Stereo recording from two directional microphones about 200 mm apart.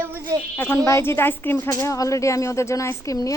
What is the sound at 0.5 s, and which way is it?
A woman's voice, 10° left (ahead or behind).